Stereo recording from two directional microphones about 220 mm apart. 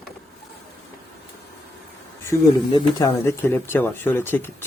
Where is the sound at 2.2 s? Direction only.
15° left (ahead or behind).